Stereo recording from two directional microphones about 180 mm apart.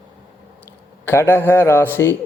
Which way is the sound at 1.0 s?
10° left (ahead or behind).